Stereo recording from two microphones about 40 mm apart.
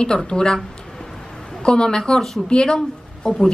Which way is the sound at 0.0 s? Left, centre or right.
Left.